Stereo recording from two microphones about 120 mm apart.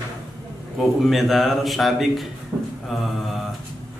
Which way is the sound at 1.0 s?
Centre (ahead or behind).